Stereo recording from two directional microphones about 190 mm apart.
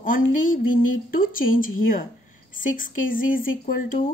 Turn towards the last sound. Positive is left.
turn(degrees=45)  # may be behind; listen again after turning